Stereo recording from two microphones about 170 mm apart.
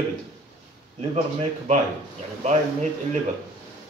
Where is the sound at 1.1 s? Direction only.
40° right (ahead or behind).